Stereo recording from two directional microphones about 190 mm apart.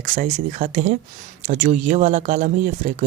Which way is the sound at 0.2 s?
35° right (ahead or behind).